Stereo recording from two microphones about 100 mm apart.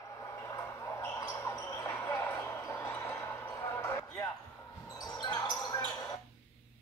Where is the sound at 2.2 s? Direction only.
25° left (ahead or behind).